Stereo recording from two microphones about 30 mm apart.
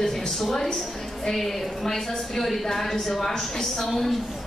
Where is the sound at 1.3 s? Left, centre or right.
Centre.